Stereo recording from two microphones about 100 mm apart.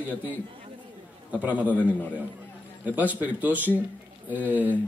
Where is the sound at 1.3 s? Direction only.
15° right (ahead or behind).